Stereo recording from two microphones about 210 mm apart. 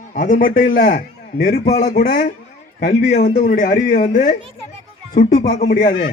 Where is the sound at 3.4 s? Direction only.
40° left (ahead or behind).